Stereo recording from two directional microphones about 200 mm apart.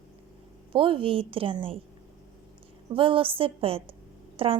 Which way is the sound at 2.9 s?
25° right (ahead or behind).